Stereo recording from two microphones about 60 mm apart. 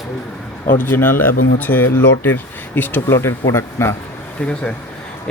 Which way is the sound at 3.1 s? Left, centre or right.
Left.